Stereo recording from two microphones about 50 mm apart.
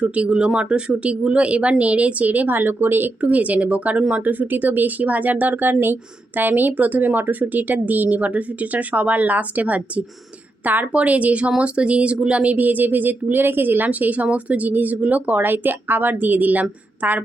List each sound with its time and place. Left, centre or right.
0.0 s speech: right
3.2 s speech: right
15.4 s speech: right